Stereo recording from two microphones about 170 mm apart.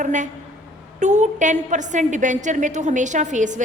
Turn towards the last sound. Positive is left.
turn(degrees=-45)  # may be behind; listen again after turning